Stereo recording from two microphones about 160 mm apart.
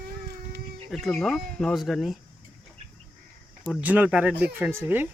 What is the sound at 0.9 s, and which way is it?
Speech, centre (ahead or behind).